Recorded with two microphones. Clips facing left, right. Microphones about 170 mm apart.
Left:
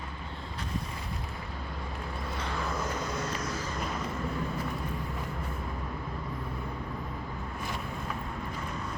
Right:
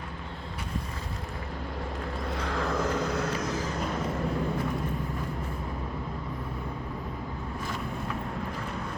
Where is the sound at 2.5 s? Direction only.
65° right (ahead or behind).